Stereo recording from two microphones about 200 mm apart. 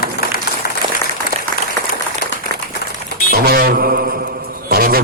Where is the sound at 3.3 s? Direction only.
50° right (ahead or behind).